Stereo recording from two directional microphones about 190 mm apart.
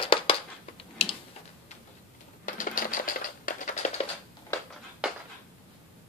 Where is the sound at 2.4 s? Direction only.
45° left (ahead or behind).